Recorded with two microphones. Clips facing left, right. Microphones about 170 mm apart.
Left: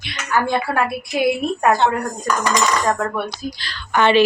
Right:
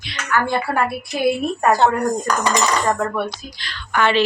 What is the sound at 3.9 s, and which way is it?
Speech, 20° left (ahead or behind).